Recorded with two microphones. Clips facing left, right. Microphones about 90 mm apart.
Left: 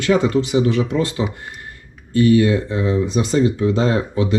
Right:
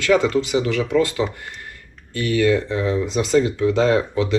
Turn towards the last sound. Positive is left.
turn(degrees=20)  # may be behind; listen again after turning